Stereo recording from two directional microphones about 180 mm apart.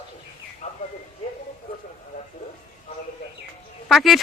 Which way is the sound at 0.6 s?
40° left (ahead or behind).